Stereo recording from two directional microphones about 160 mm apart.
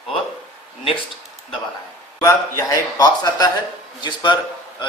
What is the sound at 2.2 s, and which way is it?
A man's voice, 20° left (ahead or behind).